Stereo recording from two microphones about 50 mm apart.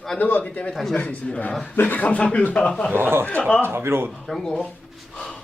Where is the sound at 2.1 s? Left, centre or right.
Left.